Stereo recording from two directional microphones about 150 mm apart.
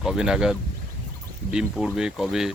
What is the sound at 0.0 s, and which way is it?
Speech, 5° right (ahead or behind).